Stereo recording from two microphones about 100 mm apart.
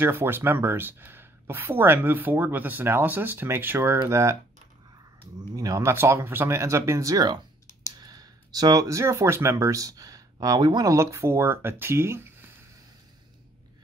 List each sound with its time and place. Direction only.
0.0 s speech: 20° right (ahead or behind)
5.6 s speech: 35° right (ahead or behind)